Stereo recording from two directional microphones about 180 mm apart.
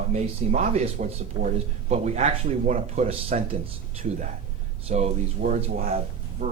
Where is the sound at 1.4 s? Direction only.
30° right (ahead or behind).